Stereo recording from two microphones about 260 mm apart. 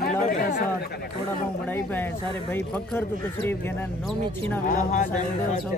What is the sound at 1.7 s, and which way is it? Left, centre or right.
A man's voice, centre.